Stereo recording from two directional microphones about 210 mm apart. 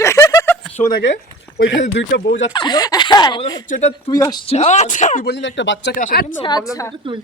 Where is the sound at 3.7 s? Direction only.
30° left (ahead or behind).